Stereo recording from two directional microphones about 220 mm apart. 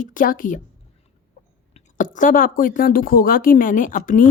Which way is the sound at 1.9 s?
35° left (ahead or behind).